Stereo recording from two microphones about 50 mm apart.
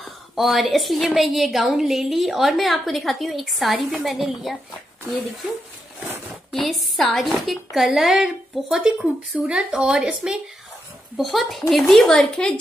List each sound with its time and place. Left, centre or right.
0.0 s a woman's voice: centre
6.5 s a woman's voice: centre
8.9 s speech: right
9.6 s speech: centre
11.1 s a woman's voice: centre
12.1 s speech: centre